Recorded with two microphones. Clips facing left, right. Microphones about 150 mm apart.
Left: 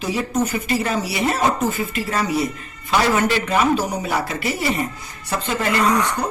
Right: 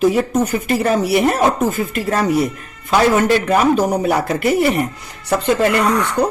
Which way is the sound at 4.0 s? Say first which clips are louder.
Right 7 dB; 55° right (ahead or behind).